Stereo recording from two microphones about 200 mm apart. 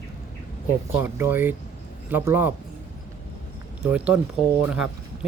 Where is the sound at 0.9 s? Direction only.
10° right (ahead or behind).